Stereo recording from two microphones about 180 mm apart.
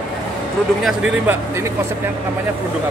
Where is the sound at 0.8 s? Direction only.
5° right (ahead or behind).